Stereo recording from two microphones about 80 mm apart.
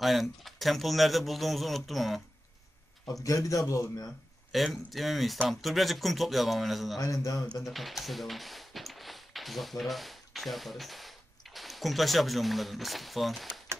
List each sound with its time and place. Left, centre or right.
0.0 s speech: centre
3.3 s a man's voice: left
4.5 s speech: centre
7.0 s a man's voice: left
7.6 s speech: centre